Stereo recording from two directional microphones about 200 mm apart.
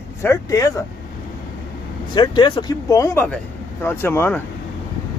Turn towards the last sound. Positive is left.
turn(degrees=10)  # may be behind; listen again after turning